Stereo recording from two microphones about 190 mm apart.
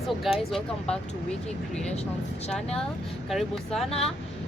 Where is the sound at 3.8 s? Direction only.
30° left (ahead or behind).